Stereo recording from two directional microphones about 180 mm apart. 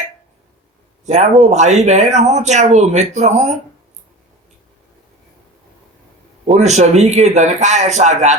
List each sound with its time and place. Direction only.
1.0 s a man's voice: 40° right (ahead or behind)
6.4 s a man's voice: 40° right (ahead or behind)